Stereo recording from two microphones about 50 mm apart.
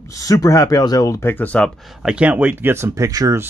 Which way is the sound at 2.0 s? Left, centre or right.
Centre.